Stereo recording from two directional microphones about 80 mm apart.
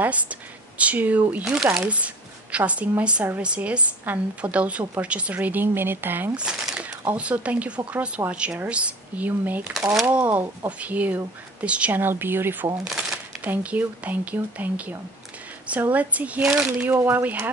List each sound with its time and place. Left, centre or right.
0.0 s speech: centre
1.4 s speech: centre
1.8 s a woman's voice: centre
6.3 s a woman's voice: centre; by 12.6 s right
12.8 s shuffling cards: centre
13.4 s a woman's voice: centre
16.9 s a woman's voice: right